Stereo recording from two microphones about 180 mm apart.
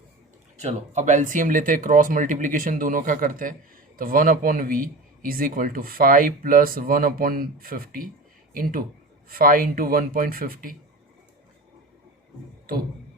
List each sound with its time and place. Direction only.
0.5 s speech: 40° right (ahead or behind)
9.3 s speech: 50° right (ahead or behind)